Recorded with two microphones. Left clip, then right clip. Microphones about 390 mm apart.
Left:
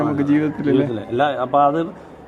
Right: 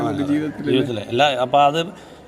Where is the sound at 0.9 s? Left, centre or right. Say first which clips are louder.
Right 2 dB; right.